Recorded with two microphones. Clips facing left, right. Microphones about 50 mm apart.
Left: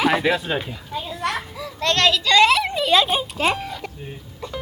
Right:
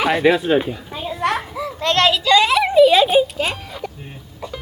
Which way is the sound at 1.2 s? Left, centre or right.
Right.